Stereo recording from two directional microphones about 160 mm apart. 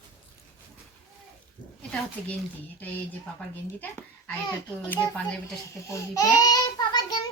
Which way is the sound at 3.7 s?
10° left (ahead or behind).